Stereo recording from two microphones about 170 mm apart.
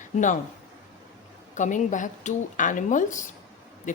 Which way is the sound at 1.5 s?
45° left (ahead or behind).